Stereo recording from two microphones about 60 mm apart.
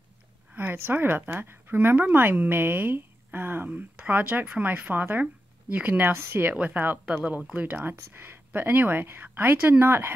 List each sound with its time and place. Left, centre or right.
0.6 s speech: right